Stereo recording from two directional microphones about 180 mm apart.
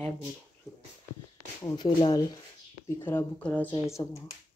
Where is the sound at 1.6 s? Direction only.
25° left (ahead or behind).